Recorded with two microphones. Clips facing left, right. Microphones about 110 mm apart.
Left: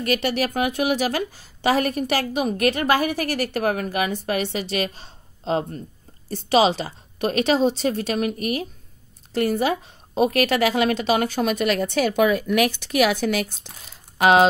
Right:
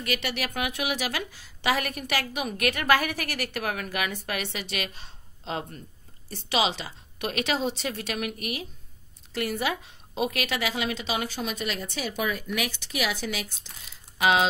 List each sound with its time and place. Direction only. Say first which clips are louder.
0.0 s a woman's voice: left 8 dB; 40° left (ahead or behind)